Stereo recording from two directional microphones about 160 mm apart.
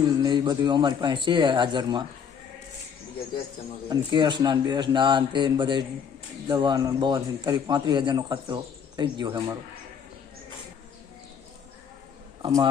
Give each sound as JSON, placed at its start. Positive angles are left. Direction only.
{"t": 0.0, "sound": "a man's voice", "side_deg": -25}
{"t": 3.8, "sound": "a man's voice", "side_deg": -30}